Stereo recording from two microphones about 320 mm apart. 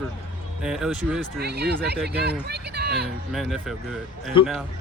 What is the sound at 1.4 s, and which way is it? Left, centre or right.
Speech, right.